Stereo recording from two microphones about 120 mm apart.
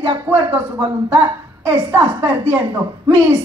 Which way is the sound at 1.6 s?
20° right (ahead or behind).